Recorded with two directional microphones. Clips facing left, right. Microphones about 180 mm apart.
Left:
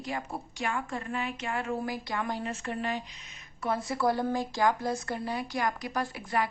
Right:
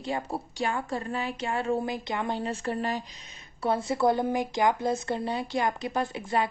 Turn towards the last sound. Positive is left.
turn(degrees=-25)  # may be behind; listen again after turning